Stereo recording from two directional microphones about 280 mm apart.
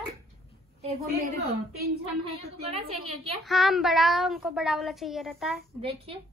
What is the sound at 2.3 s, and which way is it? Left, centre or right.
Speech, right.